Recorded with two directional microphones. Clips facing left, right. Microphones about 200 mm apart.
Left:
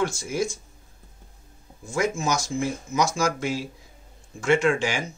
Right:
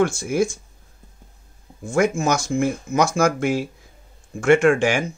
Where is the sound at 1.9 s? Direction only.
55° right (ahead or behind).